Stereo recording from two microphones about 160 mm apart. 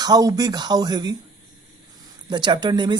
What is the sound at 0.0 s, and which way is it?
Speech, 25° right (ahead or behind).